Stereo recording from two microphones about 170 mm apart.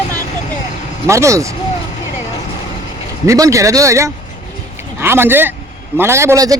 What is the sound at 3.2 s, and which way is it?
Speech, 20° right (ahead or behind).